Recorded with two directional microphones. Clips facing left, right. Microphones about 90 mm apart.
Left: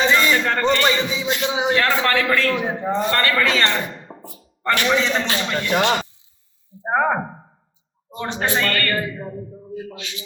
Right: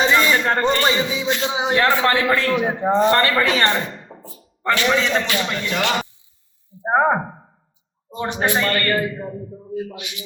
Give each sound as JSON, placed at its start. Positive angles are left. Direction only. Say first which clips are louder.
{"t": 0.0, "sound": "a man's voice", "louder": "right 1 dB", "side_deg": -20}
{"t": 4.1, "sound": "thunk", "louder": "left 2 dB", "side_deg": 25}
{"t": 4.9, "sound": "speech", "louder": "even", "side_deg": 20}
{"t": 6.7, "sound": "a man's voice", "louder": "right 2 dB", "side_deg": -20}
{"t": 9.1, "sound": "speech", "louder": "right 2 dB", "side_deg": 0}
{"t": 9.7, "sound": "a man's voice", "louder": "right 4 dB", "side_deg": -20}